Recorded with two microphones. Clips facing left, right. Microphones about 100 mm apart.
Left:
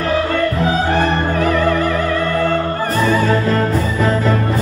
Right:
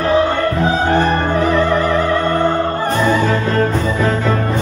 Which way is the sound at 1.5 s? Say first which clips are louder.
Right 1 dB; 25° right (ahead or behind).